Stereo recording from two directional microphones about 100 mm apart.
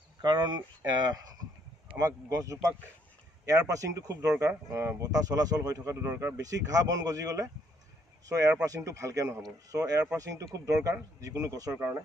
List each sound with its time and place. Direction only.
0.2 s speech: 50° right (ahead or behind)
2.0 s speech: 35° right (ahead or behind)
8.6 s speech: 35° right (ahead or behind)